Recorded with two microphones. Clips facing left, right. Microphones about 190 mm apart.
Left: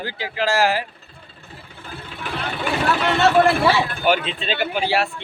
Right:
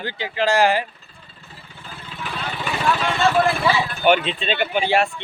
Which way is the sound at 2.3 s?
65° left (ahead or behind).